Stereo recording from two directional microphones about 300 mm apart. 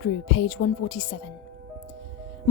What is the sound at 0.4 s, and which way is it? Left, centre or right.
Speech, left.